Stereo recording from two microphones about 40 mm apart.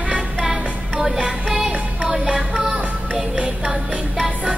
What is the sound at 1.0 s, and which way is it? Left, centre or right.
Music, centre.